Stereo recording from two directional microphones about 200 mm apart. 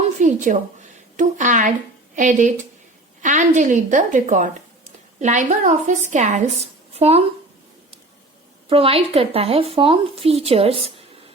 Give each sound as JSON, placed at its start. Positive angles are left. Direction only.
{"t": 0.2, "sound": "a woman's voice", "side_deg": -40}
{"t": 8.7, "sound": "speech", "side_deg": -30}